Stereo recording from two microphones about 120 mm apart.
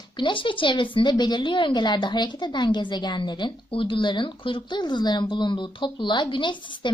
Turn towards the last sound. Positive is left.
turn(degrees=40)  # may be behind; listen again after turning